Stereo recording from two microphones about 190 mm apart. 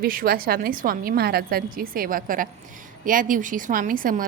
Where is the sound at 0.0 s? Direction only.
50° right (ahead or behind).